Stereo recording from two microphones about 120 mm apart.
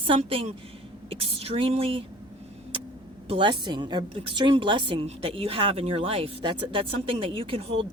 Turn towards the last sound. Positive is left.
turn(degrees=-50)  # may be behind; listen again after turning